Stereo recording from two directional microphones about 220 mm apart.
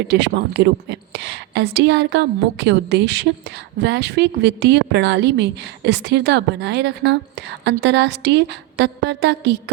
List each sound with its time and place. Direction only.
0.1 s a woman's voice: 50° right (ahead or behind)